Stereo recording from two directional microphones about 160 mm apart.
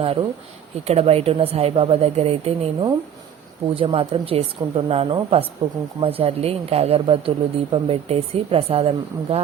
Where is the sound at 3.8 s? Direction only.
35° right (ahead or behind).